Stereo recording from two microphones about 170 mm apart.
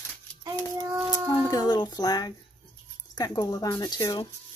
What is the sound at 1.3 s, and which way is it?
Speech, 20° left (ahead or behind).